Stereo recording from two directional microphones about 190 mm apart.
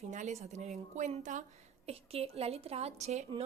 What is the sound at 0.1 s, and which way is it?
A woman's voice, 40° right (ahead or behind).